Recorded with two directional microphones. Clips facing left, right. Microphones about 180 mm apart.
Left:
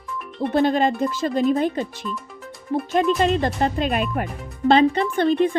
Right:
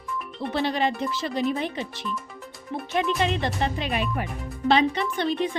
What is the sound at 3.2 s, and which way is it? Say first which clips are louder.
A woman's voice: left 5 dB; 45° left (ahead or behind).